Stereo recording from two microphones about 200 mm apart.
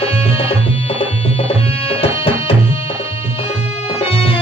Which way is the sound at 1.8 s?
30° left (ahead or behind).